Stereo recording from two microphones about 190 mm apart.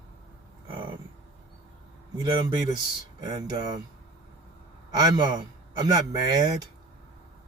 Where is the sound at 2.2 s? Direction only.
25° right (ahead or behind).